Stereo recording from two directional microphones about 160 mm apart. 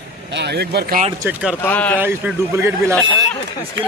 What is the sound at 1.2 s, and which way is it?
Speech, 10° right (ahead or behind).